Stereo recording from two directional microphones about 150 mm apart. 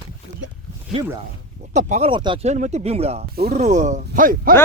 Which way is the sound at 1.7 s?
50° right (ahead or behind).